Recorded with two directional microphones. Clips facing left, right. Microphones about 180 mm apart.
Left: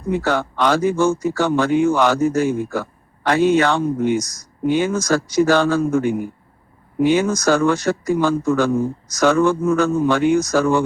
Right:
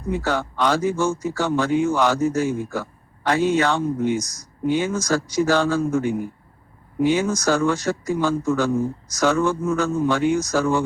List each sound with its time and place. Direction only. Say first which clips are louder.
0.1 s a man's voice: left 4 dB; 65° left (ahead or behind)